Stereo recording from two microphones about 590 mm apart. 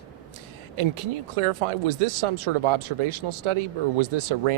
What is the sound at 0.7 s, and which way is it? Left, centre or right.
Speech, right.